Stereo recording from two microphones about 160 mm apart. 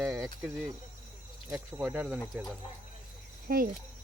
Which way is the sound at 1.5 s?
5° right (ahead or behind).